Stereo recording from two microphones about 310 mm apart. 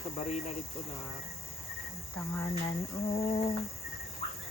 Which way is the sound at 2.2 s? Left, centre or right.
Centre.